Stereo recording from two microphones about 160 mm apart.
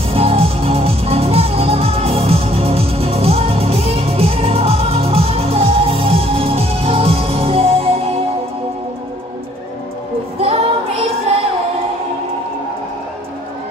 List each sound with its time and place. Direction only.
0.1 s music: 35° right (ahead or behind)
10.4 s female singing: 40° right (ahead or behind)